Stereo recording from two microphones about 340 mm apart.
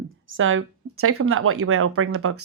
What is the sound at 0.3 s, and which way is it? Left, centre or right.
Speech, right.